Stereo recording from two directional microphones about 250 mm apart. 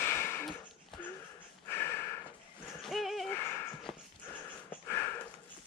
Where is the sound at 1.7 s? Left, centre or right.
Centre.